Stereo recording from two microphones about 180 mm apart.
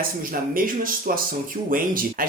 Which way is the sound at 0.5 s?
50° right (ahead or behind).